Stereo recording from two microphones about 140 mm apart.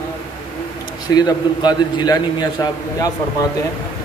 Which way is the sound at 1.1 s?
30° left (ahead or behind).